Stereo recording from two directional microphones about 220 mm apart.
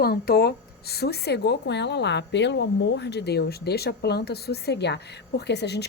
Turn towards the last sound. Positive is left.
turn(degrees=50)  # may be behind; listen again after turning